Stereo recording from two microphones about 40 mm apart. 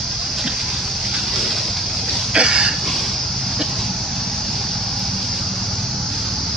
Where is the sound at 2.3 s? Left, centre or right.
Centre.